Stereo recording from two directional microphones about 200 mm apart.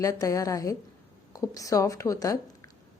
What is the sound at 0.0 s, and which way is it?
A woman's voice, 15° left (ahead or behind).